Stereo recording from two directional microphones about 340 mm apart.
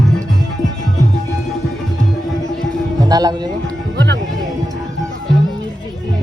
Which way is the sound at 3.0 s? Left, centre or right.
Centre.